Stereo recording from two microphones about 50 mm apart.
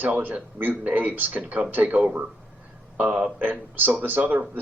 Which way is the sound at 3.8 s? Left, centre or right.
Right.